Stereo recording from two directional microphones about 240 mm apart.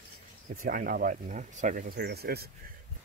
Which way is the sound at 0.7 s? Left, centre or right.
Right.